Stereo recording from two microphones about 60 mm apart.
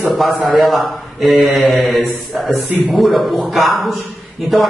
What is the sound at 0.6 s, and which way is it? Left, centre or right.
Speech, centre.